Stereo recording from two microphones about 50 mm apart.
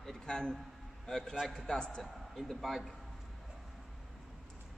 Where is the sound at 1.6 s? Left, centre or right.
Centre.